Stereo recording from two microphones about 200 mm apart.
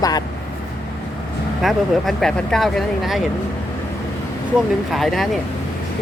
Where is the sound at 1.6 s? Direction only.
Centre (ahead or behind).